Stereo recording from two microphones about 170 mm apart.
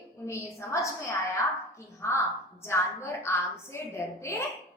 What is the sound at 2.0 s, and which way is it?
A woman's voice, 15° left (ahead or behind).